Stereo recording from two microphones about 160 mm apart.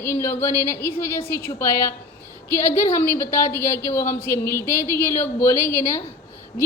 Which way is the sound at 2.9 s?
15° left (ahead or behind).